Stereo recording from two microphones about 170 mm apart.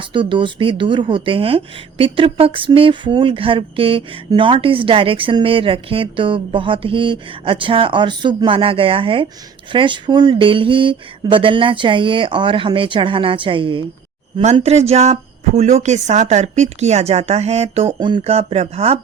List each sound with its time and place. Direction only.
0.0 s speech: 30° right (ahead or behind)